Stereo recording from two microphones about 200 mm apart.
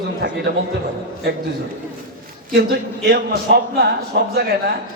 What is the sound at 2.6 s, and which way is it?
A man's voice, 50° right (ahead or behind).